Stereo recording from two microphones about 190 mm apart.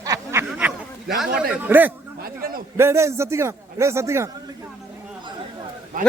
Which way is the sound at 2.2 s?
50° right (ahead or behind).